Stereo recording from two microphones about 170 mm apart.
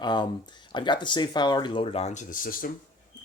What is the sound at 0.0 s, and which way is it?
Speech, 25° left (ahead or behind).